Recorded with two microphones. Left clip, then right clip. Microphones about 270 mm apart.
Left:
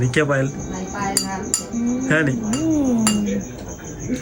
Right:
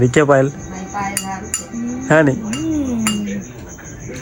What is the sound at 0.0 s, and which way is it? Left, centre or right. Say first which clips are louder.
Speech: right 7 dB; centre.